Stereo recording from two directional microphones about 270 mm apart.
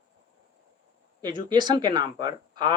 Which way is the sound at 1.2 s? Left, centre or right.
Centre.